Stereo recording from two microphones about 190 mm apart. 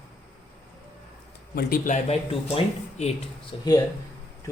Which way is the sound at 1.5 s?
45° left (ahead or behind).